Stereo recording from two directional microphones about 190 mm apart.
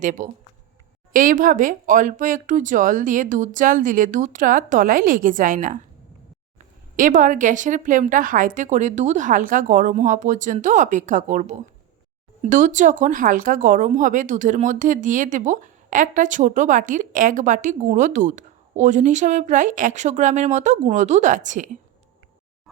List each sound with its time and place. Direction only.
0.0 s speech: 40° right (ahead or behind)
6.9 s speech: 45° right (ahead or behind)